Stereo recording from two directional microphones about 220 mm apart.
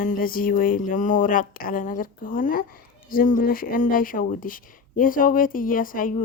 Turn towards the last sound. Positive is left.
turn(degrees=35)  # may be behind; listen again after turning